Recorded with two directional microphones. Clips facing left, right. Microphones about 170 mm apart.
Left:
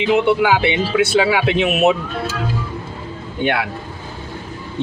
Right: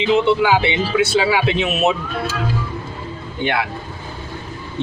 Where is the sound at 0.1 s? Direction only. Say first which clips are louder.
Even; 60° left (ahead or behind).